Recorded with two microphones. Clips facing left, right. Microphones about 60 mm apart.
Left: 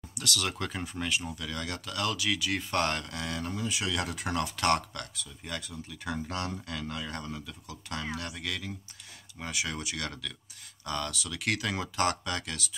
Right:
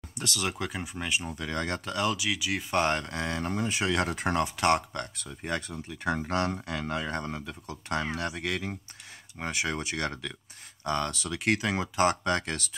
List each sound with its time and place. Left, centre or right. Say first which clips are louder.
0.2 s speech: right 1 dB; right
2.0 s speech: right 1 dB; centre; by 4.5 s right
4.6 s speech: right 2 dB; right
5.1 s speech: right 6 dB; right
12.3 s speech: right 6 dB; right